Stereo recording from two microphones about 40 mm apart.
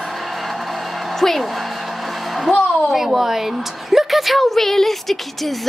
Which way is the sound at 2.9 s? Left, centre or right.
Centre.